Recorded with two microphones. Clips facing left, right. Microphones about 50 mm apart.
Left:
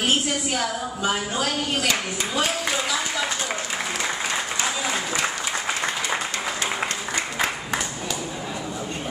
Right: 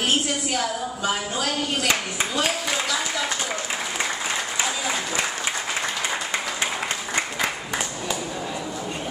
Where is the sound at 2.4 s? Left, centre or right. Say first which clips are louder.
Even; centre.